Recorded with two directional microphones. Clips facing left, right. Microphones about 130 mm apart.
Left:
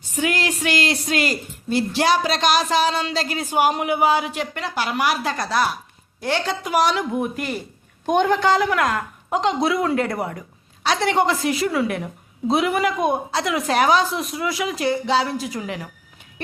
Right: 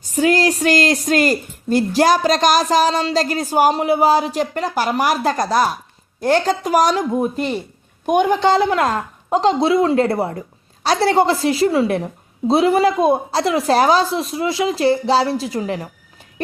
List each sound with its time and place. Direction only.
0.0 s a woman's voice: 40° right (ahead or behind)
8.0 s a woman's voice: 15° right (ahead or behind)
8.4 s a woman's voice: 25° right (ahead or behind)